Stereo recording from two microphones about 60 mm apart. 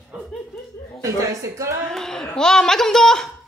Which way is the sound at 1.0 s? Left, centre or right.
Right.